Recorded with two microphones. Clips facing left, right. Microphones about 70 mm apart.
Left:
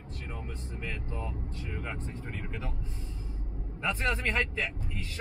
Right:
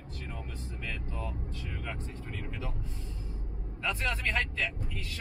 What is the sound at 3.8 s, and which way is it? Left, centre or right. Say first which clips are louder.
Speech: left 2 dB; left.